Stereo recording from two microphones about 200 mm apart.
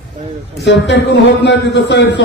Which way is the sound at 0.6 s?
55° left (ahead or behind).